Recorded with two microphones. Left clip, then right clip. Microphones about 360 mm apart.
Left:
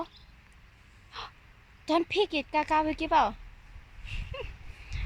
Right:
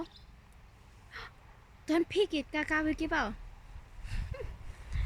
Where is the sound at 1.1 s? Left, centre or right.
Centre.